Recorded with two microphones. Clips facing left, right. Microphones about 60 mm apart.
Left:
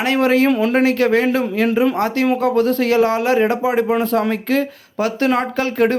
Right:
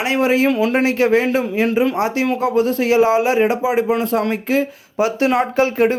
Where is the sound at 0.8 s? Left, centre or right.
Centre.